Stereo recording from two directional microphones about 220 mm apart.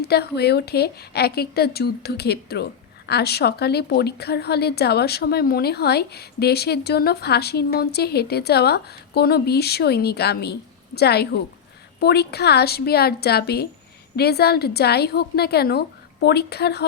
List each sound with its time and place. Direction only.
0.0 s a woman's voice: 45° left (ahead or behind)